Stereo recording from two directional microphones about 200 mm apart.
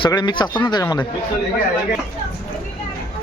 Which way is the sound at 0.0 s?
20° left (ahead or behind).